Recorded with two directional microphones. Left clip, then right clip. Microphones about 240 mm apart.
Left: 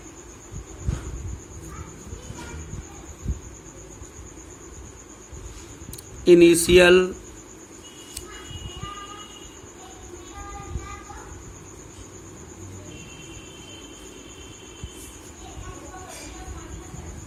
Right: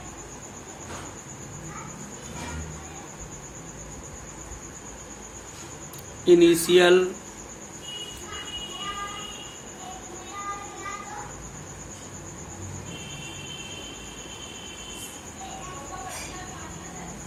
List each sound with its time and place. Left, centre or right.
6.2 s speech: left